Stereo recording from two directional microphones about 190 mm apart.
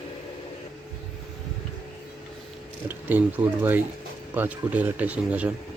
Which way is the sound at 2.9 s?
10° right (ahead or behind).